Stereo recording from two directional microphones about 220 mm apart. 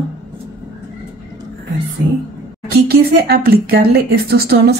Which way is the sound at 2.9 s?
45° right (ahead or behind).